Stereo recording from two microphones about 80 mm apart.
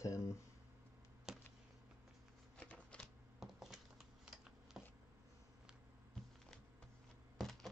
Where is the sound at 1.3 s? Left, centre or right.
Centre.